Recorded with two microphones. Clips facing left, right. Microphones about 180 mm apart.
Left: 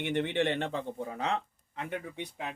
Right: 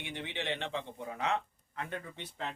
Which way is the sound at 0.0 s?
60° left (ahead or behind).